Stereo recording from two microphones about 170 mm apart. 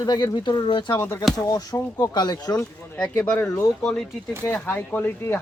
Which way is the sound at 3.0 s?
10° left (ahead or behind).